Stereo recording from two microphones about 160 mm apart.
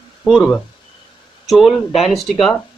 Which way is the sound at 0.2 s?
5° left (ahead or behind).